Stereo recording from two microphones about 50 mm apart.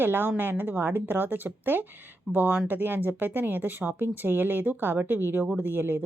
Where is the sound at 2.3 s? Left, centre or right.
Centre.